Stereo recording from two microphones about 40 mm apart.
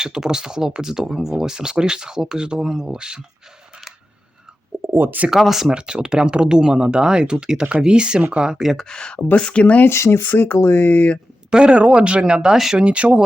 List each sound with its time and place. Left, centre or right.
0.0 s speech: centre
4.9 s speech: right
5.3 s speech: centre
5.7 s speech: right
8.7 s speech: centre
9.1 s speech: left
9.8 s speech: left
10.2 s speech: left
11.5 s speech: right
12.7 s speech: right